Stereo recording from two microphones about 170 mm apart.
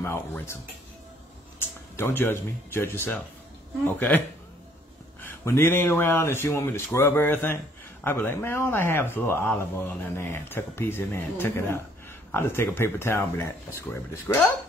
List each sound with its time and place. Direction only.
0.0 s speech: 15° left (ahead or behind)
1.6 s speech: 15° left (ahead or behind)
5.2 s speech: 15° left (ahead or behind)